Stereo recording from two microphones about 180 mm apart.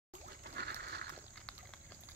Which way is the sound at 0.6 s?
65° right (ahead or behind).